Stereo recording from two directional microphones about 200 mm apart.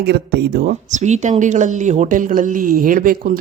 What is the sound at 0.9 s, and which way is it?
Speech, 35° right (ahead or behind).